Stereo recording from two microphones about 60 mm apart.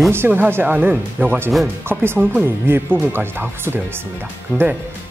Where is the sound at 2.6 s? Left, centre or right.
Right.